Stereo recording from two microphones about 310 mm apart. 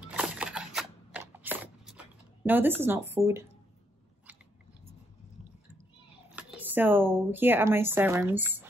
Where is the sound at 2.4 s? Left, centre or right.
Centre.